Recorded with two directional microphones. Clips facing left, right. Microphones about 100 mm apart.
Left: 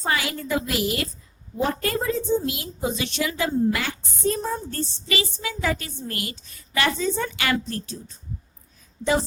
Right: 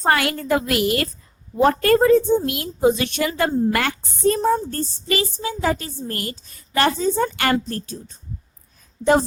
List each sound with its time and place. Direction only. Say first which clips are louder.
0.0 s a woman's voice: right 6 dB; 60° right (ahead or behind)